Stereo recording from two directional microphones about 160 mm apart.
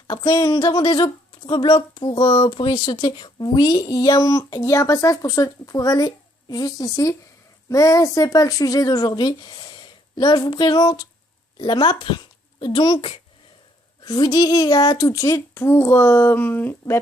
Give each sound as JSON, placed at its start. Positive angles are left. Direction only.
{"t": 0.1, "sound": "a woman's voice", "side_deg": 25}